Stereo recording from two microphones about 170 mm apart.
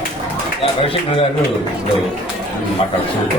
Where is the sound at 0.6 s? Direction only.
35° left (ahead or behind).